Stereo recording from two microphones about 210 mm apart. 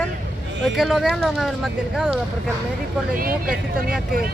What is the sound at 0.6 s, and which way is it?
Speech, centre (ahead or behind).